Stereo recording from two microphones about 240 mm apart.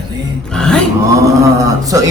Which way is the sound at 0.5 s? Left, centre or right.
Centre.